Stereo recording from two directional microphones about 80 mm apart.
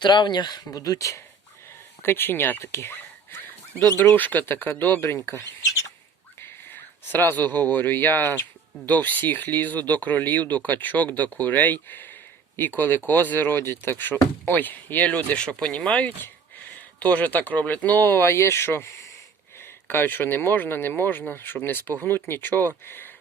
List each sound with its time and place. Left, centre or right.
0.0 s speech: left
2.0 s speech: left
5.0 s speech: left
6.4 s speech: left